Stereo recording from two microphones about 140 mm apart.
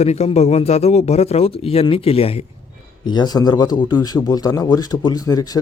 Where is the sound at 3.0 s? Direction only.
30° left (ahead or behind).